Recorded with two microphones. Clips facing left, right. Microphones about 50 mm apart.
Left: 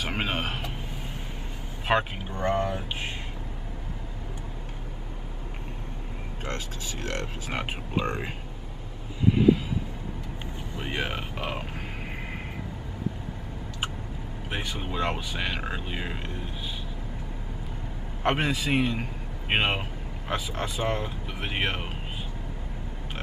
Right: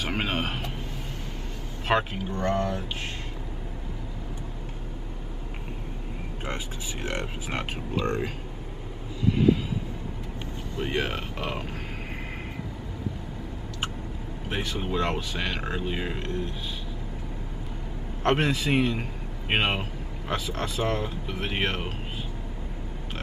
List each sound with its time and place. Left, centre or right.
0.0 s speech: centre
1.9 s speech: centre
6.4 s speech: centre
7.9 s speech: centre
10.8 s speech: centre
14.5 s speech: centre
18.2 s speech: centre